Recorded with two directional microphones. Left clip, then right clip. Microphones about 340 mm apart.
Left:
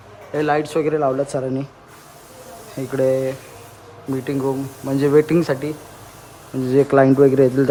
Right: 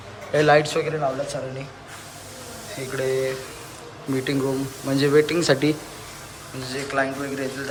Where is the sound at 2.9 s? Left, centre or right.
Centre.